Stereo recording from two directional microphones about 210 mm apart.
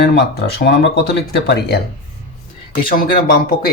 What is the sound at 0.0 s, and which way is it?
Speech, 50° left (ahead or behind).